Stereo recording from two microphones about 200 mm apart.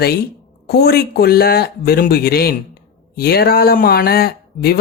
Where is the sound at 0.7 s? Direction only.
55° left (ahead or behind).